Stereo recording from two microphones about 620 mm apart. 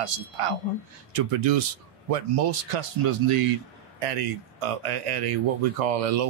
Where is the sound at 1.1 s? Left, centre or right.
Right.